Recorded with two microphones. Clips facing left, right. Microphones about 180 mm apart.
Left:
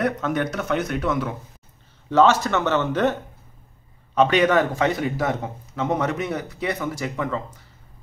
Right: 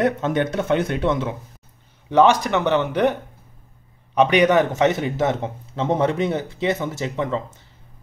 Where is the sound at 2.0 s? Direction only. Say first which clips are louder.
Right 1 dB; 15° right (ahead or behind).